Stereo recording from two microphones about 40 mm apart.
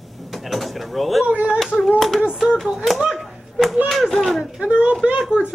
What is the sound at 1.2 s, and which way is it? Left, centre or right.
Speech, right.